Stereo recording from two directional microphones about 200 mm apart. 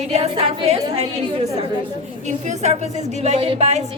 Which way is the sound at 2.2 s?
35° right (ahead or behind).